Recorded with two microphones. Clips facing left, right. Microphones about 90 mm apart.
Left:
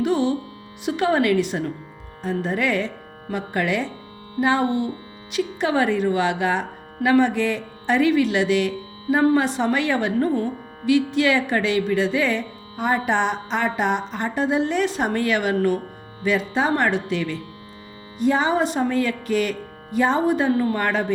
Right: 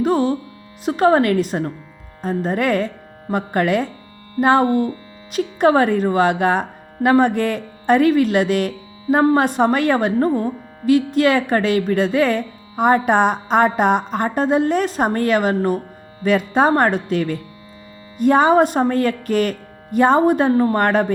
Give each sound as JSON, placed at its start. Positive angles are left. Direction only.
{"t": 0.0, "sound": "a woman's voice", "side_deg": -40}
{"t": 16.2, "sound": "speech", "side_deg": -50}